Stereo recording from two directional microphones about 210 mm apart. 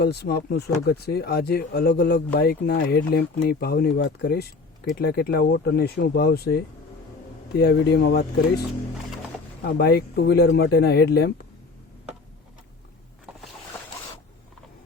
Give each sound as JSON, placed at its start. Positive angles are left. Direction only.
{"t": 0.0, "sound": "speech", "side_deg": 50}
{"t": 9.6, "sound": "speech", "side_deg": 50}